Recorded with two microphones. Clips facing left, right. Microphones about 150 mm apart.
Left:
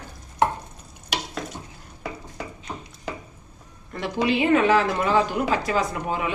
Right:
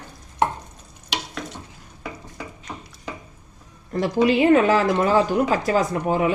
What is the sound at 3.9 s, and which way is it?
Speech, 40° right (ahead or behind).